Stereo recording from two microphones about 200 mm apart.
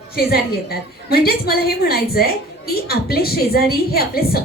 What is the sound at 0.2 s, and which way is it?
Speech, 50° left (ahead or behind).